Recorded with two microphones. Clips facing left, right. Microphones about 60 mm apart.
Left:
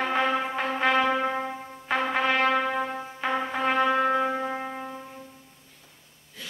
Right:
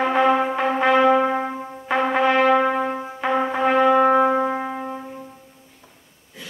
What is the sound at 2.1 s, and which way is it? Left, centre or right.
Brass instrument, centre.